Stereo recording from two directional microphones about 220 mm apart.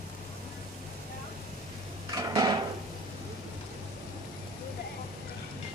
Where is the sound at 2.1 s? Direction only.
15° right (ahead or behind).